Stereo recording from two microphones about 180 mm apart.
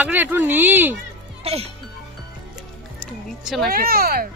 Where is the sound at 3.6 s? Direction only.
55° right (ahead or behind).